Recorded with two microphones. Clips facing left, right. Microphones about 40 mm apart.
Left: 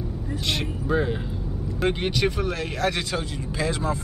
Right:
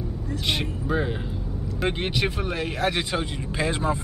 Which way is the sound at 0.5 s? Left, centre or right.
Centre.